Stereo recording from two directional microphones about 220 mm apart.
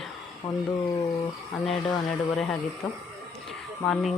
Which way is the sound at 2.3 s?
Centre (ahead or behind).